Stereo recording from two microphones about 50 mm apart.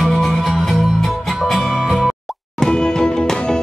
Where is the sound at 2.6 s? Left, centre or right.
Centre.